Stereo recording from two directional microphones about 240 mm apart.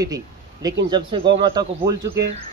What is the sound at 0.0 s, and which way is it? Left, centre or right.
Speech, centre.